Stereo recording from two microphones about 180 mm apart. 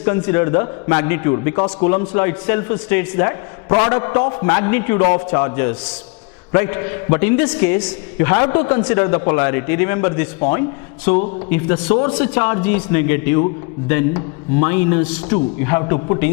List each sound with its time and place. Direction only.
0.0 s a man's voice: 15° left (ahead or behind)